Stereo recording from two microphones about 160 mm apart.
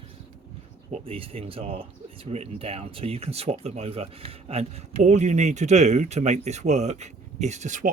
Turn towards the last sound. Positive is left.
turn(degrees=-50)  # may be behind; listen again after turning